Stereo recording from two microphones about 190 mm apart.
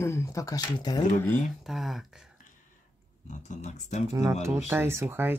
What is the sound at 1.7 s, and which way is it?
Speech, centre (ahead or behind).